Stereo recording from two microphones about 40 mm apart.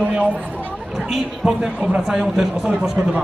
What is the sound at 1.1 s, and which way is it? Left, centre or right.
Speech, centre.